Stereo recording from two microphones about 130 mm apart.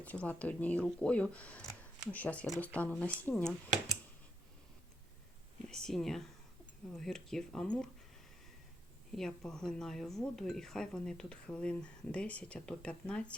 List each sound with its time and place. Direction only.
0.0 s speech: 10° left (ahead or behind)
5.6 s speech: 5° left (ahead or behind)
9.1 s speech: 5° left (ahead or behind)